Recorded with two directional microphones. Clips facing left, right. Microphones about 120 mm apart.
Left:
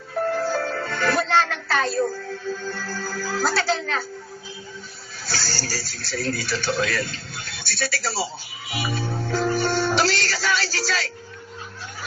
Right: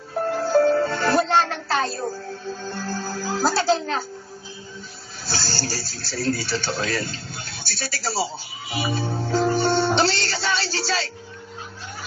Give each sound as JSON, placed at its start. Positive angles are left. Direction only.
{"t": 0.3, "sound": "music", "side_deg": -25}
{"t": 3.2, "sound": "a child's voice", "side_deg": -20}
{"t": 3.5, "sound": "a child's voice", "side_deg": -30}
{"t": 5.3, "sound": "music", "side_deg": -20}
{"t": 5.9, "sound": "a man's voice", "side_deg": -35}